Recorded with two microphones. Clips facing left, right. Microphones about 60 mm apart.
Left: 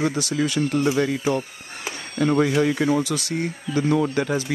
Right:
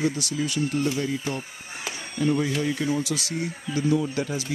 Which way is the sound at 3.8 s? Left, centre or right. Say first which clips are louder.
Left 2 dB; left.